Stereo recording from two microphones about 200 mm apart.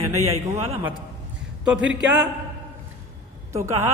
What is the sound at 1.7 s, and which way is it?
Speech, 5° right (ahead or behind).